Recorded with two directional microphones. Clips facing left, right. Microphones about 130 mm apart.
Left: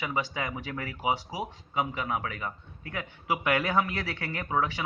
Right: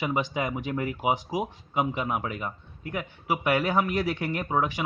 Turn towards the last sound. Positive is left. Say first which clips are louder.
# right 3 dB
turn(degrees=-15)  # may be behind; listen again after turning